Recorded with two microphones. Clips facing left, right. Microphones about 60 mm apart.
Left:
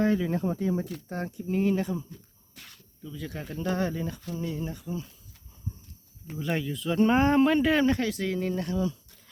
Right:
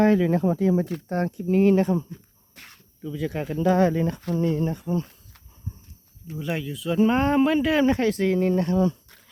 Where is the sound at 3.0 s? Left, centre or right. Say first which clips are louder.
Right 9 dB; right.